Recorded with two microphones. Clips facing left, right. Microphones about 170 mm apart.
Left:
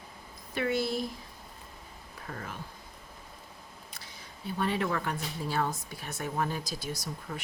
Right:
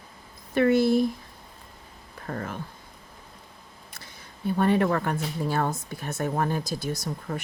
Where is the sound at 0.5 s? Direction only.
50° right (ahead or behind).